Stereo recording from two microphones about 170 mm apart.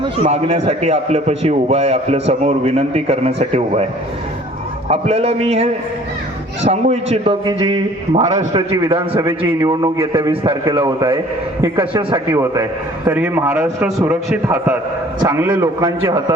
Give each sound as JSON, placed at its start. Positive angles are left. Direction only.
{"t": 0.0, "sound": "a man's voice", "side_deg": -35}
{"t": 4.9, "sound": "a man's voice", "side_deg": -35}
{"t": 7.4, "sound": "a man's voice", "side_deg": -25}
{"t": 8.2, "sound": "a man's voice", "side_deg": -40}
{"t": 9.0, "sound": "a man's voice", "side_deg": -10}
{"t": 13.1, "sound": "a man's voice", "side_deg": -10}